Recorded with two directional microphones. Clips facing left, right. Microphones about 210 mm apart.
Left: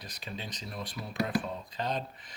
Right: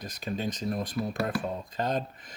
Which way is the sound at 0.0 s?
45° right (ahead or behind).